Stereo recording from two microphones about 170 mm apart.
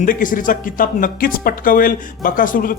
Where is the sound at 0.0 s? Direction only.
50° left (ahead or behind).